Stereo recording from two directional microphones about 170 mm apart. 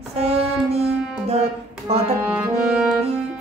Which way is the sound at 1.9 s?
35° right (ahead or behind).